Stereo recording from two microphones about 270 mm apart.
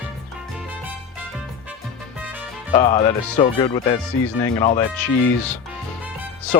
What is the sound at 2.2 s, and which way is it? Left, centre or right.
Music, centre.